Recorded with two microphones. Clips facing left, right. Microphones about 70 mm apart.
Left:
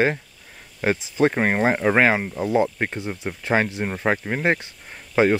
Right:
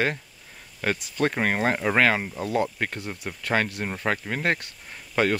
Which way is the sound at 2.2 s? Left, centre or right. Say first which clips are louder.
Left 5 dB; centre.